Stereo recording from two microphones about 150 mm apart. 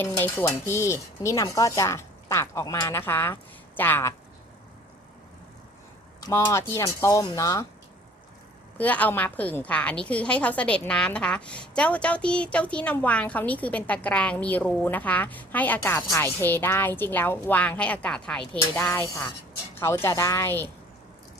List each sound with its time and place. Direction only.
0.0 s a woman's voice: 15° left (ahead or behind)
6.1 s a sound: 25° left (ahead or behind)
6.4 s speech: 15° left (ahead or behind)
8.8 s a woman's voice: 10° left (ahead or behind)